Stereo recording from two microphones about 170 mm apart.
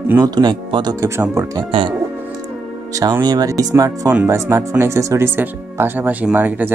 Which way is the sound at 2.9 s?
20° right (ahead or behind).